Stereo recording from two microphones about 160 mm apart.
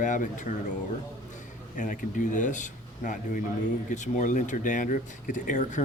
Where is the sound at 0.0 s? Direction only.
55° left (ahead or behind).